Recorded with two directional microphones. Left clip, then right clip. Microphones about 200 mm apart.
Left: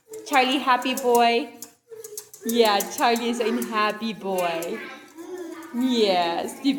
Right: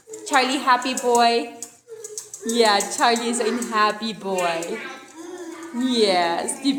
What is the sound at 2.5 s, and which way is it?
A woman's voice, 10° left (ahead or behind).